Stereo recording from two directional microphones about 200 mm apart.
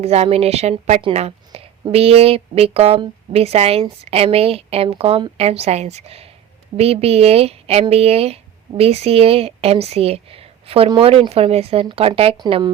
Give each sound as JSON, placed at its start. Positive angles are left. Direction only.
{"t": 0.0, "sound": "a woman's voice", "side_deg": -30}